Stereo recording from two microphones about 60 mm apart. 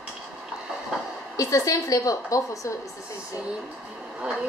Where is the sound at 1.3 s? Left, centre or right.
Left.